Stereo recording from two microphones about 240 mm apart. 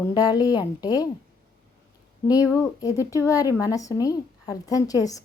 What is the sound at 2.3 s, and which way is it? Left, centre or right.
Speech, centre.